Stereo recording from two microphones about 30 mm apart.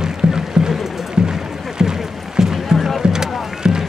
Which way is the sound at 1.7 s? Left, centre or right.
Centre.